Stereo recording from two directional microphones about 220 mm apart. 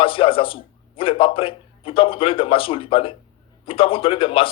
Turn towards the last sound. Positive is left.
turn(degrees=25)  # may be behind; listen again after turning